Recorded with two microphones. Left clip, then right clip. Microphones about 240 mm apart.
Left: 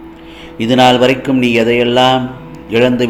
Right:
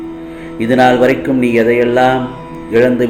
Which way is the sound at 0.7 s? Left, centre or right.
Left.